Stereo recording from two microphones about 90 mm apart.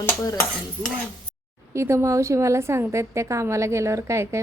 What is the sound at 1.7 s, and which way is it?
A woman's voice, 30° right (ahead or behind).